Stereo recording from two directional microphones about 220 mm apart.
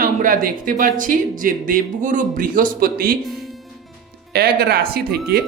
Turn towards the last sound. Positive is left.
turn(degrees=-45)  # may be behind; listen again after turning